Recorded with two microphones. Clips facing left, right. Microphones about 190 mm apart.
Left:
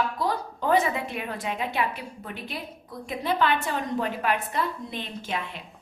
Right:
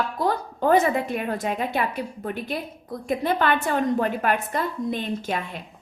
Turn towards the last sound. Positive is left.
turn(degrees=-45)  # may be behind; listen again after turning